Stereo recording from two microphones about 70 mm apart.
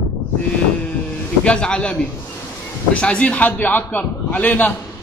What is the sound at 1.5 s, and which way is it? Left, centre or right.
Speech, centre.